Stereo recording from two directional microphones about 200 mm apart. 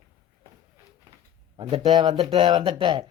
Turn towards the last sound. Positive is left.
turn(degrees=-25)  # may be behind; listen again after turning